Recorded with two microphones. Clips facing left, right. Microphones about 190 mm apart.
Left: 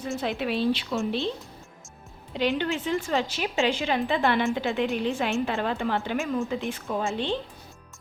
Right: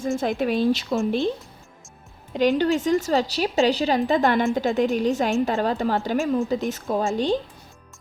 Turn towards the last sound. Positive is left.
turn(degrees=-40)  # may be behind; listen again after turning